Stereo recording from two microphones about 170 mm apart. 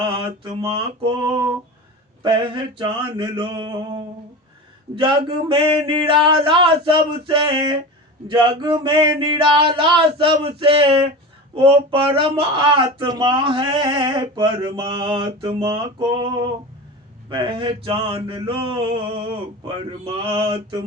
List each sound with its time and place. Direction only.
0.5 s mantra: 30° right (ahead or behind)
2.2 s speech: 30° right (ahead or behind)
4.9 s mantra: 30° right (ahead or behind)
11.5 s speech: 30° right (ahead or behind)
17.2 s mantra: 30° right (ahead or behind)